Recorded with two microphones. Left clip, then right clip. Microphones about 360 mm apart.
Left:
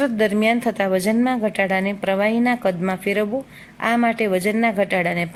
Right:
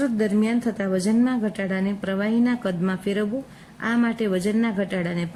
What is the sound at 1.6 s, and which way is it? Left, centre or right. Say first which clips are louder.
Speech: left 8 dB; left.